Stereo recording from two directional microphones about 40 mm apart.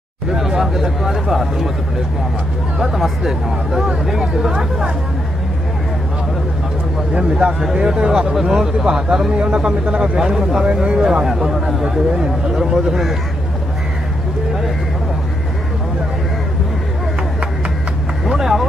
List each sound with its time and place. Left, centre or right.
0.3 s a man's voice: centre
2.8 s a man's voice: centre
7.2 s a man's voice: right; by 9.3 s centre
9.4 s a man's voice: right; by 13.1 s centre
18.2 s vehicle: centre